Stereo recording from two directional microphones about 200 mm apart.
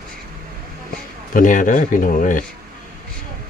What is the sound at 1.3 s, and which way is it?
Speech, 40° left (ahead or behind).